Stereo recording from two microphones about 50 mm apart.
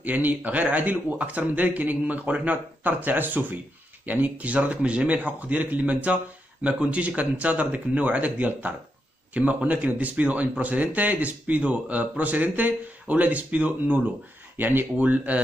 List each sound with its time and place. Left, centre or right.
0.0 s a man's voice: right
14.6 s speech: right
15.0 s speech: right